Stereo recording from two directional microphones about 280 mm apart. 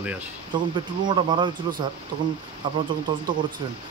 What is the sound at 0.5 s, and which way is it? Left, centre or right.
Speech, centre.